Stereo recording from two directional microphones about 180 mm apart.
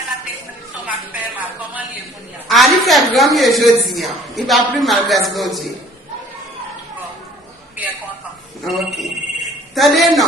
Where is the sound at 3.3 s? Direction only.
Centre (ahead or behind).